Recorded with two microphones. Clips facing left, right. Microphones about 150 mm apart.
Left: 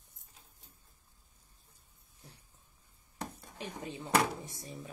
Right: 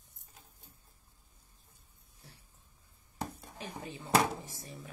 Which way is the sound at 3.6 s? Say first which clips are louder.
Left 2 dB; 20° left (ahead or behind).